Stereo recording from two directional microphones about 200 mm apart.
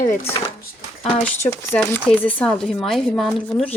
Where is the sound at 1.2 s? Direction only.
10° left (ahead or behind).